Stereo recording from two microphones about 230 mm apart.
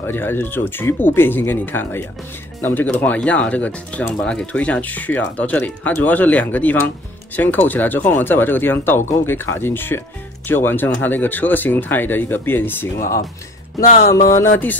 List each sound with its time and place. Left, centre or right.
0.0 s speech: centre
13.8 s music: left